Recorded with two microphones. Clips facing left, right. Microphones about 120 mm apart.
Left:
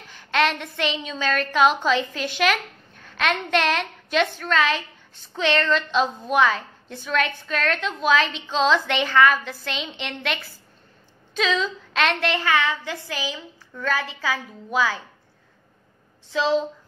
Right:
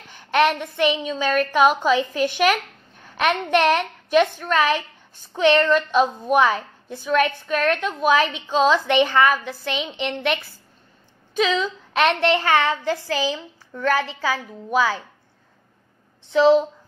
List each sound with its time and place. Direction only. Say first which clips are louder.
0.3 s a woman's voice: right 4 dB; 15° right (ahead or behind)
12.4 s a woman's voice: right 3 dB; 35° right (ahead or behind)
16.3 s a child's voice: right 8 dB; 20° right (ahead or behind)